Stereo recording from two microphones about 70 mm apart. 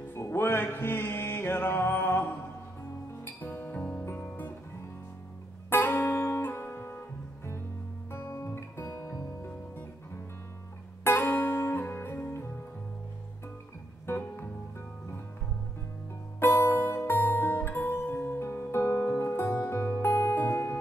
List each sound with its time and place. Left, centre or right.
0.1 s music: left
5.7 s music: left
11.1 s music: left
14.0 s music: left
16.3 s music: left